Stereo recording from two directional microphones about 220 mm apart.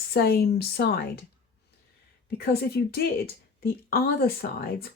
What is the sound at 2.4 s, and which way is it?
Speech, 45° left (ahead or behind).